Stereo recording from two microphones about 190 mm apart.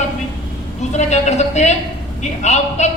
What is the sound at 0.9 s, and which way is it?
A man's voice, 35° left (ahead or behind).